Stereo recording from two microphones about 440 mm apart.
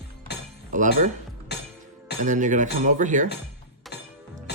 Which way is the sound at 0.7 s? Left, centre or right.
Centre.